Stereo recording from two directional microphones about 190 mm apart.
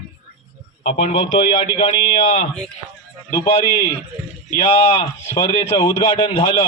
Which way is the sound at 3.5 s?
30° left (ahead or behind).